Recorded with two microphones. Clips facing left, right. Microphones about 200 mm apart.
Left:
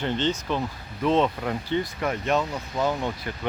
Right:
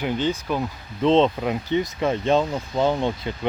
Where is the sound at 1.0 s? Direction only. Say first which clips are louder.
Right 4 dB; 25° right (ahead or behind).